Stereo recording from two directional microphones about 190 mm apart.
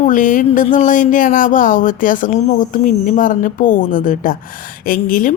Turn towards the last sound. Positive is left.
turn(degrees=45)  # may be behind; listen again after turning